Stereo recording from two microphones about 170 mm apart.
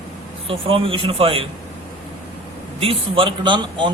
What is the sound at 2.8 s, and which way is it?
A man's voice, 30° right (ahead or behind).